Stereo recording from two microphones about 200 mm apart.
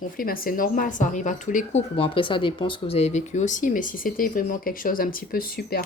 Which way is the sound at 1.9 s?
25° left (ahead or behind).